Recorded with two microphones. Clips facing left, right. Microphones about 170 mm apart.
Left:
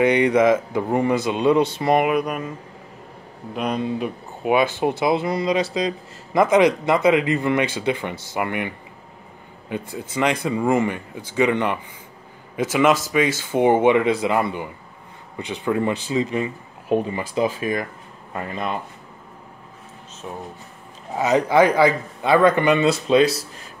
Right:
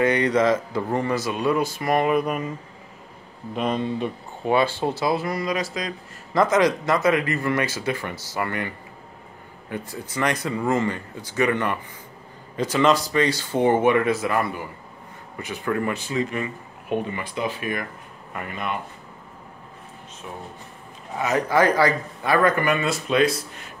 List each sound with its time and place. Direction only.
0.0 s speech: 15° left (ahead or behind)
2.2 s speech: centre (ahead or behind)
3.5 s speech: centre (ahead or behind); by 6.4 s 25° left (ahead or behind)
6.4 s speech: 15° left (ahead or behind); by 18.8 s 30° left (ahead or behind)
21.2 s speech: 20° left (ahead or behind)